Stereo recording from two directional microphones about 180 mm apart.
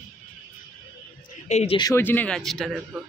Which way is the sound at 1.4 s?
35° left (ahead or behind).